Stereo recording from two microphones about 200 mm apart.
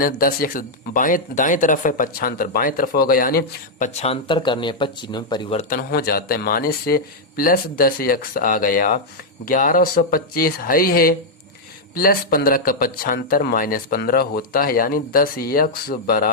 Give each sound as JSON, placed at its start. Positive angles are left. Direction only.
{"t": 0.0, "sound": "speech", "side_deg": 45}
{"t": 5.6, "sound": "speech", "side_deg": 45}